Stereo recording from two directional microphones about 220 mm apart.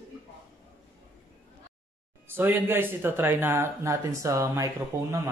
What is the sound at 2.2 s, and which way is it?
Speech, 10° right (ahead or behind).